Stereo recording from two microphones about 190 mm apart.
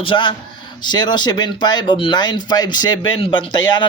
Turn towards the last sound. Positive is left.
turn(degrees=25)  # may be behind; listen again after turning